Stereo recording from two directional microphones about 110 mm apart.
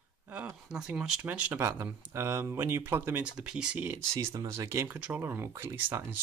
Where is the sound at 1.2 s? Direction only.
20° right (ahead or behind).